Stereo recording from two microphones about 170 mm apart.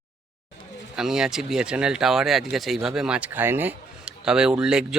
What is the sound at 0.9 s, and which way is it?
Speech, 5° right (ahead or behind).